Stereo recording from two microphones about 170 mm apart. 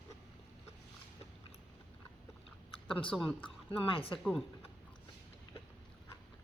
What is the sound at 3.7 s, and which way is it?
Speech, 30° left (ahead or behind).